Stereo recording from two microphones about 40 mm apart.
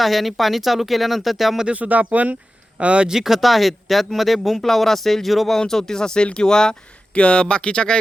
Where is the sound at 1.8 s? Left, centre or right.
Right.